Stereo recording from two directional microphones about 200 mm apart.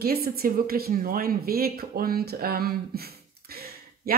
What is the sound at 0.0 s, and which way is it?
A woman's voice, 50° right (ahead or behind).